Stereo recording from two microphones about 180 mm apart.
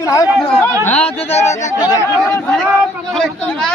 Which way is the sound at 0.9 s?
35° left (ahead or behind).